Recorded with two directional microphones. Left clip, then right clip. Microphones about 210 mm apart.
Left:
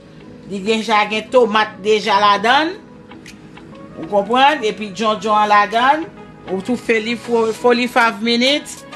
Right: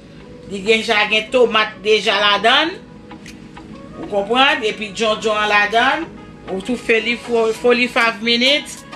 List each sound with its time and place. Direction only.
0.5 s speech: 55° left (ahead or behind)
4.1 s speech: 55° left (ahead or behind)